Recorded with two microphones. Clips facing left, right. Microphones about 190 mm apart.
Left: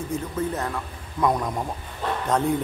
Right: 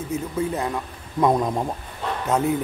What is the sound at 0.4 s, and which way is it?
Speech, 10° right (ahead or behind).